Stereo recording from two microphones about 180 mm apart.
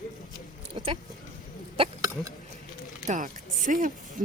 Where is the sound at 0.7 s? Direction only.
25° right (ahead or behind).